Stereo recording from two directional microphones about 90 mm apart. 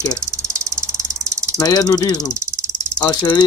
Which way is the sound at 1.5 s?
45° left (ahead or behind).